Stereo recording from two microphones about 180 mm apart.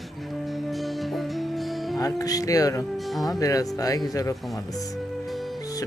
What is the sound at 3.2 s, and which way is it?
Speech, 20° left (ahead or behind).